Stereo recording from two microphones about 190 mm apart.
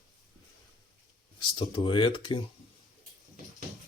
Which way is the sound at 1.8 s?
25° left (ahead or behind).